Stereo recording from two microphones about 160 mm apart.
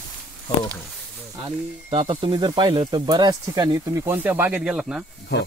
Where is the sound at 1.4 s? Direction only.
30° right (ahead or behind); by 5.0 s 5° right (ahead or behind).